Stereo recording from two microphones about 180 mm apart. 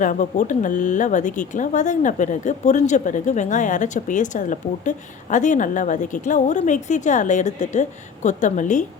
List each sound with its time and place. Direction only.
0.0 s speech: 45° left (ahead or behind)